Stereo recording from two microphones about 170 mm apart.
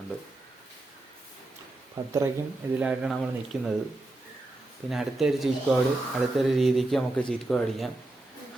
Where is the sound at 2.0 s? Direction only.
20° right (ahead or behind).